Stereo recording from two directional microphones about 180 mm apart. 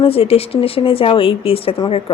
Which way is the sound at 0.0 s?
35° left (ahead or behind).